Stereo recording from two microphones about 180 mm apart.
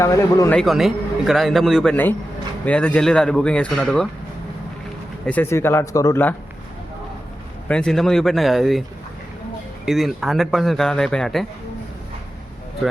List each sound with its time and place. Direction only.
0.0 s speech: 15° left (ahead or behind)
0.6 s speech: centre (ahead or behind)
5.2 s speech: 10° left (ahead or behind)
7.7 s speech: 5° left (ahead or behind)
9.8 s speech: centre (ahead or behind)